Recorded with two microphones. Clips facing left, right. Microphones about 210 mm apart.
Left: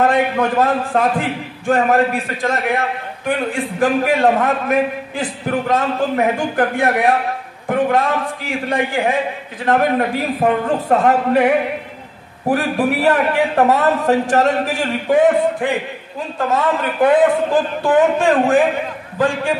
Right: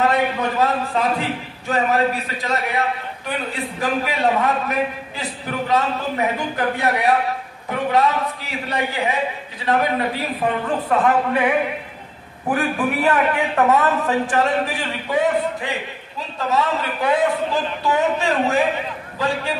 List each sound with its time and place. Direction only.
0.0 s a man's voice: 50° left (ahead or behind)